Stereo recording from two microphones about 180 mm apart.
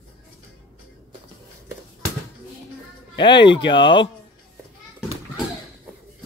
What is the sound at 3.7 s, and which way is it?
Speech, 25° left (ahead or behind).